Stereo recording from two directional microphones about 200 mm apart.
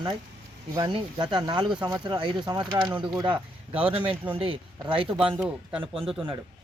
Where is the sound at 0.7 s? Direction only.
20° right (ahead or behind).